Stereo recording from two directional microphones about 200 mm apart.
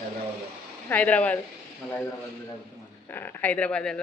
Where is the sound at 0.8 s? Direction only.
10° left (ahead or behind).